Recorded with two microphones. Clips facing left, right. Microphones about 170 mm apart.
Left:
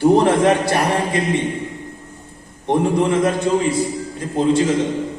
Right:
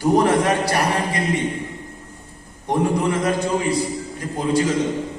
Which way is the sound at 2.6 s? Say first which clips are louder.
Left 3 dB; 25° left (ahead or behind).